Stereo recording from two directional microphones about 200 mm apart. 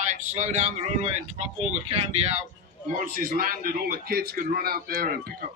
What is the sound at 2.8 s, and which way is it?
A man's voice, 40° right (ahead or behind).